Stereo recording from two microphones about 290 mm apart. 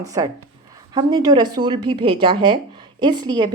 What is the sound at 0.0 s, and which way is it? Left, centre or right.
Speech, centre.